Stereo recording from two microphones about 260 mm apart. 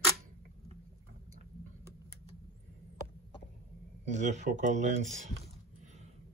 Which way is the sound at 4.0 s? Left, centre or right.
Right.